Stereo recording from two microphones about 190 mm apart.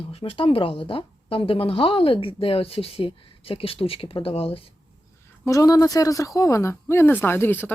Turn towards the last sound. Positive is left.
turn(degrees=10)  # may be behind; listen again after turning